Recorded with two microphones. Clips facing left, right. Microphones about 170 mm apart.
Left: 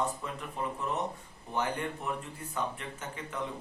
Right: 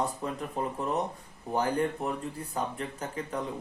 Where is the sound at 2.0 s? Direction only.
35° right (ahead or behind).